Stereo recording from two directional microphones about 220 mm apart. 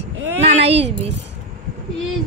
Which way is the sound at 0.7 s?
55° right (ahead or behind).